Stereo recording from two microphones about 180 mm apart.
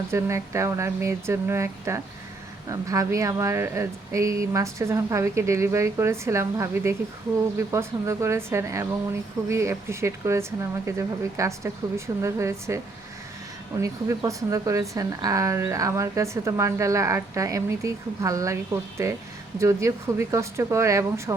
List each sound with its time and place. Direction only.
0.1 s speech: 15° right (ahead or behind)